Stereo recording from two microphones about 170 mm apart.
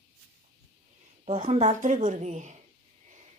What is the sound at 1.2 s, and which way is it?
Speech, 40° right (ahead or behind).